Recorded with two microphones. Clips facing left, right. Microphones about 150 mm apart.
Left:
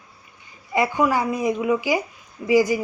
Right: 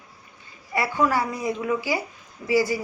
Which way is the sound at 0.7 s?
15° left (ahead or behind).